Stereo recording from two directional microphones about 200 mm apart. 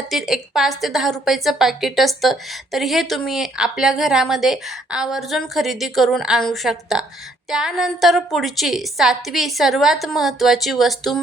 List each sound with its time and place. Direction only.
0.1 s a woman's voice: centre (ahead or behind)